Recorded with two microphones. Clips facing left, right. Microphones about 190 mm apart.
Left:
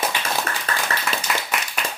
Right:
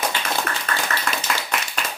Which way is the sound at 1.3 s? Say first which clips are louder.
Left 1 dB; 5° left (ahead or behind).